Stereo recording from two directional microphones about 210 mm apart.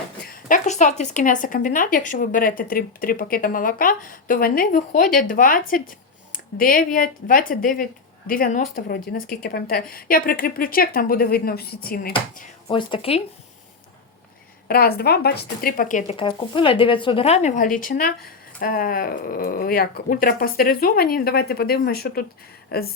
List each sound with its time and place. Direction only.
0.3 s speech: 40° left (ahead or behind)
12.6 s speech: 25° left (ahead or behind)
14.7 s speech: 45° left (ahead or behind)